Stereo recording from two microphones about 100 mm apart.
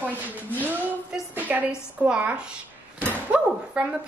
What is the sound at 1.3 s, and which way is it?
A woman's voice, 15° right (ahead or behind).